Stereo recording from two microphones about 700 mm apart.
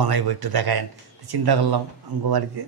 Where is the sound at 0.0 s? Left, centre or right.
Right.